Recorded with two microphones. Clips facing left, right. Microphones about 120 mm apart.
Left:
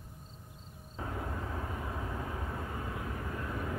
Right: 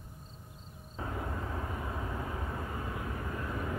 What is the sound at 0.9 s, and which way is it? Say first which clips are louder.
Vehicle: right 1 dB; 30° right (ahead or behind).